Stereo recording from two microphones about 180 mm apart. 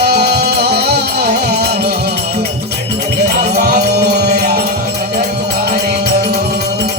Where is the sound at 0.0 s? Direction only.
65° right (ahead or behind).